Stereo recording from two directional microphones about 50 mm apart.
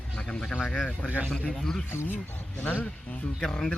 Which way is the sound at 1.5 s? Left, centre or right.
Centre.